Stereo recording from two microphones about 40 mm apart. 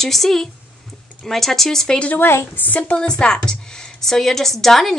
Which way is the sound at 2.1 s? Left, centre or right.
Left.